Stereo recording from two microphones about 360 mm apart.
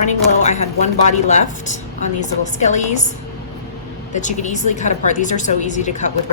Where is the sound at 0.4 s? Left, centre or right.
Centre.